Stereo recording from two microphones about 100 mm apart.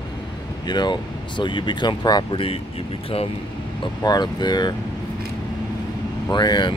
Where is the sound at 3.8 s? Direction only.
45° left (ahead or behind).